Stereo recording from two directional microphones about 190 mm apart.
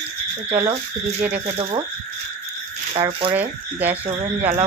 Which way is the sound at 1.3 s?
30° right (ahead or behind).